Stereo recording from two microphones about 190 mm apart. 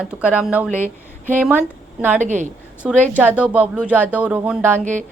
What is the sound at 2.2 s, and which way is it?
Speech, 40° right (ahead or behind).